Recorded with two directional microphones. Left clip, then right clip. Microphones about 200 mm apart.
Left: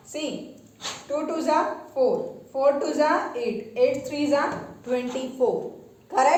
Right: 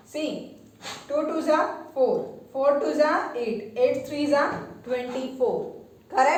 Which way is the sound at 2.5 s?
35° left (ahead or behind).